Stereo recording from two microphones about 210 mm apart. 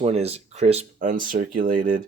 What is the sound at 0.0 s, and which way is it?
Speech, 30° right (ahead or behind).